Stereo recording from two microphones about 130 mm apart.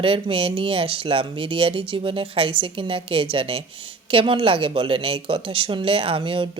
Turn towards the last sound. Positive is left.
turn(degrees=-45)  # may be behind; listen again after turning